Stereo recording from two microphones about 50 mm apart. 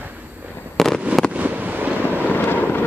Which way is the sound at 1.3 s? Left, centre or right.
Right.